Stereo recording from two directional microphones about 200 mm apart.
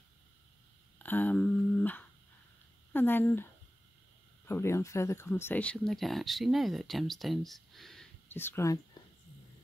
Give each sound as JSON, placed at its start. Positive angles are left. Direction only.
{"t": 0.9, "sound": "a sound", "side_deg": 10}
{"t": 2.9, "sound": "speech", "side_deg": 10}
{"t": 4.5, "sound": "speech", "side_deg": 15}